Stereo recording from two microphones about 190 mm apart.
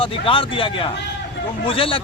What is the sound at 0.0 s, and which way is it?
Speech, 25° left (ahead or behind).